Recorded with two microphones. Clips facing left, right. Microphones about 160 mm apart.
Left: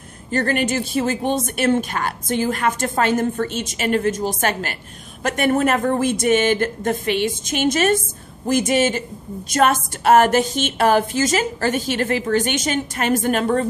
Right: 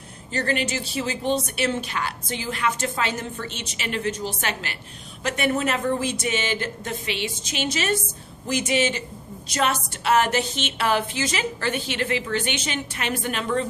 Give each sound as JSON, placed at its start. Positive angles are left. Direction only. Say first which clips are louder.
{"t": 0.3, "sound": "a woman's voice", "louder": "left 5 dB", "side_deg": 50}